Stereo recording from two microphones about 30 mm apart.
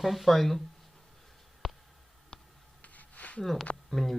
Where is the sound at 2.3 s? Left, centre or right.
Left.